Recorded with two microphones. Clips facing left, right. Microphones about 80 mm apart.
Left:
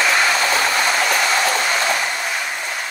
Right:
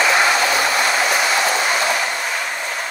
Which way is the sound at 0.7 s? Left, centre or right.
Centre.